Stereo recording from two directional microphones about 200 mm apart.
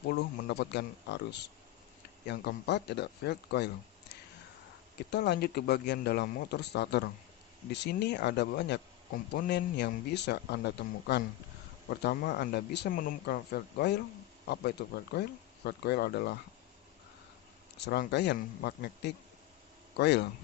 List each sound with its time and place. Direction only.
0.1 s speech: 50° left (ahead or behind)
5.1 s speech: 55° left (ahead or behind)
17.7 s speech: 55° left (ahead or behind)